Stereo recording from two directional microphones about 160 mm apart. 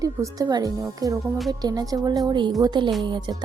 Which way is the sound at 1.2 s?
Centre (ahead or behind).